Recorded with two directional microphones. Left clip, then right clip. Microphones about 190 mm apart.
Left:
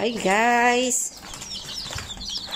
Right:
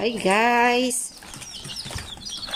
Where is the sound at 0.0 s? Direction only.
Centre (ahead or behind).